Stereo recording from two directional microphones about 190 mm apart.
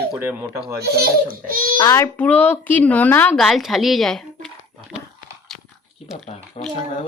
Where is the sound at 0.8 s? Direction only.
55° right (ahead or behind).